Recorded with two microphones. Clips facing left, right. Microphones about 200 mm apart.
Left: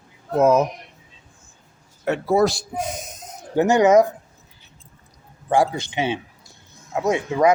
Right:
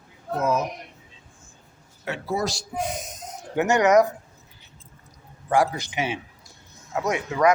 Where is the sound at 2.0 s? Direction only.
55° left (ahead or behind).